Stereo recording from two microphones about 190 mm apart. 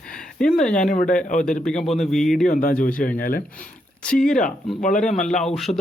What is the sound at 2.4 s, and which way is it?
Speech, 45° left (ahead or behind).